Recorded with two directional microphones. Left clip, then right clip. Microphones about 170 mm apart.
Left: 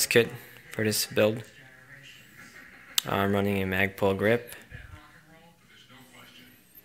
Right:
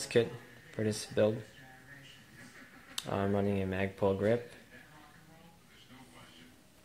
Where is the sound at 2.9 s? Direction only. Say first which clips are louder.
Left 7 dB; 20° left (ahead or behind).